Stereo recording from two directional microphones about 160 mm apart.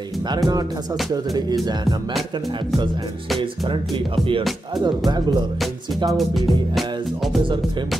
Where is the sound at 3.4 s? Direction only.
30° right (ahead or behind).